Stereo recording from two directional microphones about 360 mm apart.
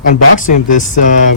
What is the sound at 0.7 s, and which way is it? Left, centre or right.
Speech, left.